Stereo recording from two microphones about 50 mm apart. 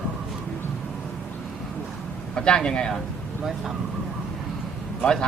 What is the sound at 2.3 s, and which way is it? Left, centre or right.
Speech, centre.